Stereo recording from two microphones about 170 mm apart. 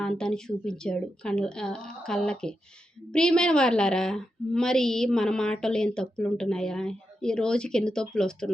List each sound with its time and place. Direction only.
0.0 s a woman's voice: 5° left (ahead or behind)